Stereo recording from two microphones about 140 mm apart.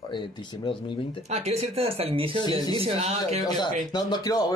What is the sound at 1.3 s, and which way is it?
Speech, 50° right (ahead or behind).